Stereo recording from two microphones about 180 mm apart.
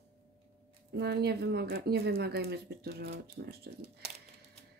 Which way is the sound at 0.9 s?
65° right (ahead or behind).